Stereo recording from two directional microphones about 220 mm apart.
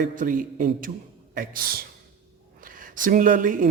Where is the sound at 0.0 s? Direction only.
35° right (ahead or behind).